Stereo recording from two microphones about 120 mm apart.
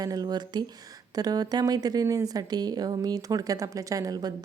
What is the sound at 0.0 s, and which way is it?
A woman's voice, 30° right (ahead or behind).